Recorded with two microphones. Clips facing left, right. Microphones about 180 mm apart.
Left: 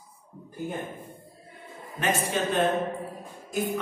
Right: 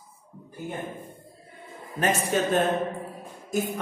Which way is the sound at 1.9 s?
40° right (ahead or behind).